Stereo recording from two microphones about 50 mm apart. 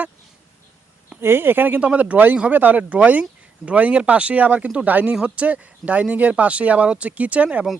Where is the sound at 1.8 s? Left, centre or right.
Right.